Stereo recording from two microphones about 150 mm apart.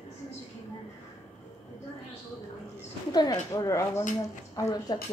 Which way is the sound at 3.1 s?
25° left (ahead or behind).